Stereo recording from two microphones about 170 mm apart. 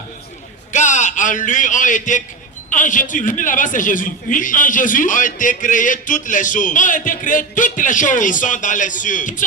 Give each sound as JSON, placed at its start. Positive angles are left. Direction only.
{"t": 0.7, "sound": "a man's voice", "side_deg": 45}